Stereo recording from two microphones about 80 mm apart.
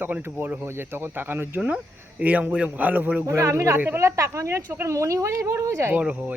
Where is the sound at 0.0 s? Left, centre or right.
Right.